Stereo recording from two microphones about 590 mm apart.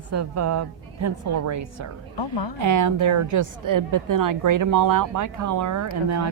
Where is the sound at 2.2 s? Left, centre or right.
Left.